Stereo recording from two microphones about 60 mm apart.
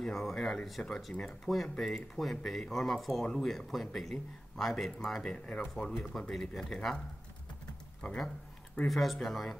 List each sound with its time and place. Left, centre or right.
0.0 s speech: centre
1.1 s speech: centre
1.5 s a man's voice: centre
8.8 s a man's voice: centre